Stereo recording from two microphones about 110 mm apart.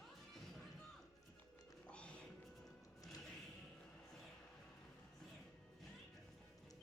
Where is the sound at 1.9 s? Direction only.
10° left (ahead or behind).